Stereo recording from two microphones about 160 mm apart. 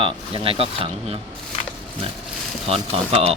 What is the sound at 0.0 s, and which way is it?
Speech, 35° right (ahead or behind).